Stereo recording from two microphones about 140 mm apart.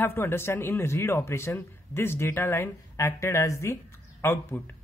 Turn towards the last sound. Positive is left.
turn(degrees=15)  # may be behind; listen again after turning